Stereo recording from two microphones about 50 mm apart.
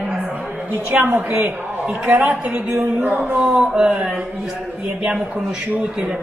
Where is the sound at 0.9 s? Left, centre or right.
Right.